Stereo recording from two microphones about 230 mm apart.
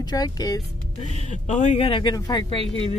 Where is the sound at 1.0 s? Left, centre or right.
Left.